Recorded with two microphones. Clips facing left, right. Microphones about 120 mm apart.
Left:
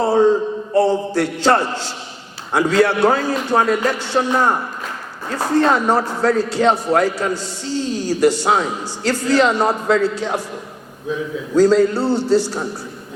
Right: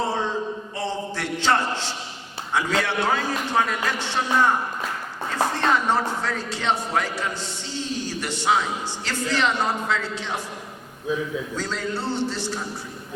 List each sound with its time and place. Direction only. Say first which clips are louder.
0.1 s a sound: left 12 dB; 40° left (ahead or behind)
2.5 s a man's voice: left 9 dB; 40° left (ahead or behind)
11.5 s a man's voice: left 15 dB; 40° left (ahead or behind)